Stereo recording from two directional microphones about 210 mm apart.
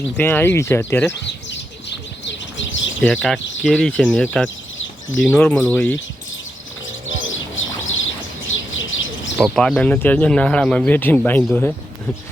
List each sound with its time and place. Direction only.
0.2 s speech: 10° left (ahead or behind)
1.2 s bird: 55° left (ahead or behind)
3.0 s speech: 5° left (ahead or behind)
4.4 s bird: 65° left (ahead or behind)
5.2 s speech: 5° left (ahead or behind)
7.3 s bird: 70° left (ahead or behind)
9.4 s speech: 5° left (ahead or behind)